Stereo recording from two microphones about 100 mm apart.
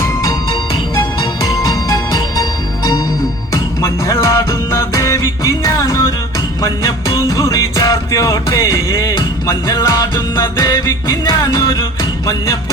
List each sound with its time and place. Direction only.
1.7 s music: 35° left (ahead or behind)